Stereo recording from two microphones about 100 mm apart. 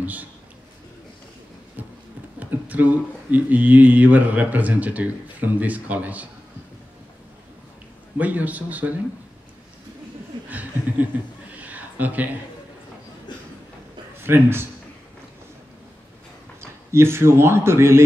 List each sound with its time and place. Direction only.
0.0 s a man's voice: 15° right (ahead or behind)
1.8 s a sound: 15° right (ahead or behind)
2.7 s speech: 15° right (ahead or behind)
8.2 s speech: 15° right (ahead or behind)
10.5 s a sound: 15° right (ahead or behind)
14.1 s a man's voice: 25° right (ahead or behind)
16.6 s speech: 25° right (ahead or behind)